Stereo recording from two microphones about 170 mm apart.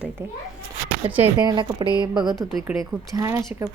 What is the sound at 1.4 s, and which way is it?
Speech, 25° right (ahead or behind).